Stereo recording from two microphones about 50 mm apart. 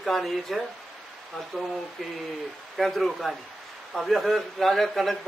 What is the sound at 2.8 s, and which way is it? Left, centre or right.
A man's voice, centre.